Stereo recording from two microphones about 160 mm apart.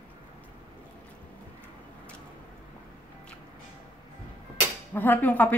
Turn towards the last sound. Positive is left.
turn(degrees=10)  # may be behind; listen again after turning